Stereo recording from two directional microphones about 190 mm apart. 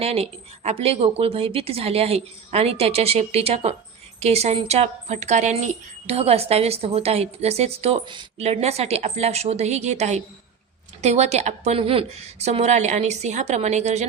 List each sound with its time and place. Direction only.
0.0 s speech: 35° right (ahead or behind)